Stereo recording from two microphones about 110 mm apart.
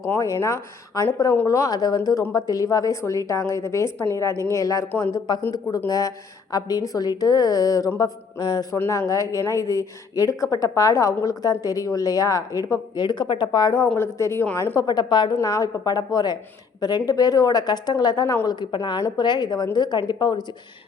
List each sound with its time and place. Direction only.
0.1 s speech: 25° left (ahead or behind)
4.9 s speech: 15° left (ahead or behind)
5.7 s a woman's voice: 35° left (ahead or behind)
8.7 s a woman's voice: 25° left (ahead or behind)
13.1 s a woman's voice: 45° left (ahead or behind)
13.9 s speech: 25° left (ahead or behind)
14.8 s a woman's voice: 40° left (ahead or behind)
15.4 s a woman's voice: 30° left (ahead or behind)